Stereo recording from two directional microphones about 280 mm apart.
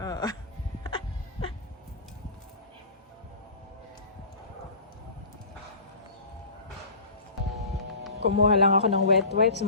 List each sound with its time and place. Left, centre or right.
0.0 s a sound: centre
8.2 s speech: right
8.7 s speech: right
9.3 s speech: right